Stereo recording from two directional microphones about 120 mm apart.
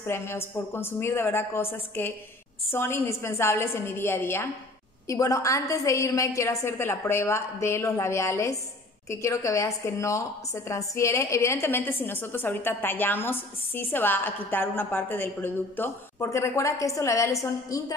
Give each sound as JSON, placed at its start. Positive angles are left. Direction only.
{"t": 0.0, "sound": "a woman's voice", "side_deg": 20}